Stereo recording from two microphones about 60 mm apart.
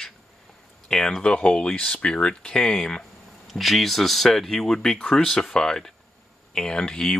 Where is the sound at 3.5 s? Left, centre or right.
Centre.